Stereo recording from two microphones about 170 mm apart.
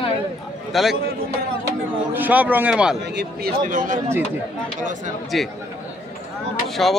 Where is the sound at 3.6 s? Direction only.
50° right (ahead or behind).